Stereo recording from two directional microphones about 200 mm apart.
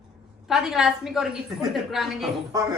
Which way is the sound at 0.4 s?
Centre (ahead or behind).